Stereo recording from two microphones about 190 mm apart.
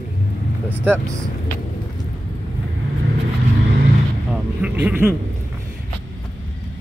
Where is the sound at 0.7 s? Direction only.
10° right (ahead or behind).